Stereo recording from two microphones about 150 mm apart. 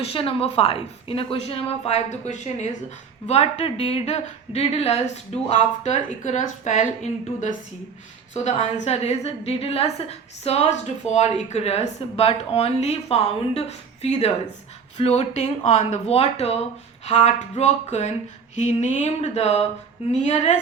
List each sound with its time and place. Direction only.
0.0 s a woman's voice: 40° left (ahead or behind)